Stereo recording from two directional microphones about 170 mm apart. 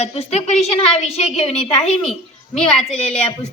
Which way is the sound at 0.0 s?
35° left (ahead or behind).